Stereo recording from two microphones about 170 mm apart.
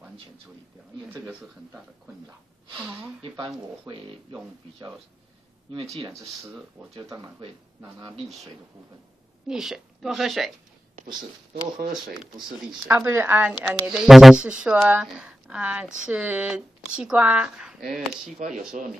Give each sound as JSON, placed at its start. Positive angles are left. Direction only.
{"t": 1.0, "sound": "speech", "side_deg": -10}
{"t": 2.8, "sound": "speech", "side_deg": -10}
{"t": 3.2, "sound": "speech", "side_deg": -30}
{"t": 5.9, "sound": "speech", "side_deg": -25}
{"t": 9.5, "sound": "speech", "side_deg": 0}
{"t": 11.1, "sound": "speech", "side_deg": -25}
{"t": 12.6, "sound": "speech", "side_deg": -10}